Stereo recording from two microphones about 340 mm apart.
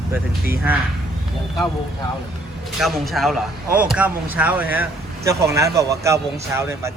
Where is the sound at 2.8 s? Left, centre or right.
Centre.